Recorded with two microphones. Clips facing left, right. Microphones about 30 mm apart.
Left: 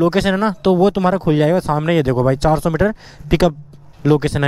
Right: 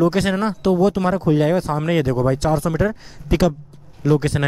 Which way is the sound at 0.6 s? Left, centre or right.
Left.